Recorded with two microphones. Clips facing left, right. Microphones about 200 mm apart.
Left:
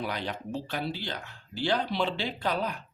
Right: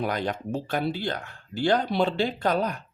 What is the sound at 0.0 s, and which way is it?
Speech, 45° right (ahead or behind).